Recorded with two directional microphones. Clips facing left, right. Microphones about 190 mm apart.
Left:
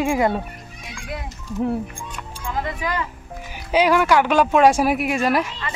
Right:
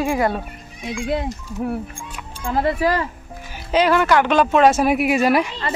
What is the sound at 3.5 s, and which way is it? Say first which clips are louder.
Speech: even; 10° left (ahead or behind).